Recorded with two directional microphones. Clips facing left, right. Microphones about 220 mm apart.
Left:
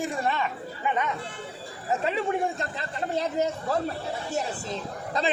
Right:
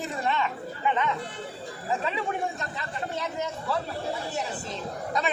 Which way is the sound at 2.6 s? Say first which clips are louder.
Left 2 dB; 35° left (ahead or behind).